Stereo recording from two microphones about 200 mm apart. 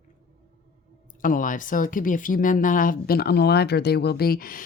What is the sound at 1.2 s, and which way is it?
Speech, 40° left (ahead or behind).